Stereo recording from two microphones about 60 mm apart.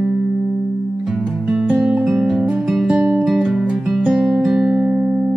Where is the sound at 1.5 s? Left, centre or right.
Centre.